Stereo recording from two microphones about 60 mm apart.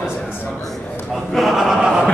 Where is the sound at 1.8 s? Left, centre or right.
Centre.